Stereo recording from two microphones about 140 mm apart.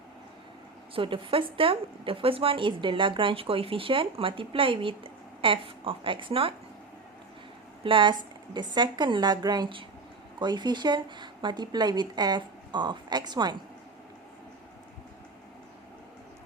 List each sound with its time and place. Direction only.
0.9 s a woman's voice: 40° right (ahead or behind)
7.9 s a woman's voice: 35° right (ahead or behind)